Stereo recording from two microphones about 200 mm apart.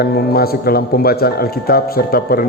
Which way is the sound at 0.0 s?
50° left (ahead or behind).